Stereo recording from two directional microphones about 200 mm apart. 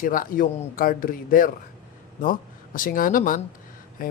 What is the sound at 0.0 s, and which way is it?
Speech, 45° left (ahead or behind).